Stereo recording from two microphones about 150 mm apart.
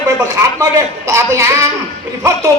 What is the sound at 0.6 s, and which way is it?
Speech, 20° right (ahead or behind).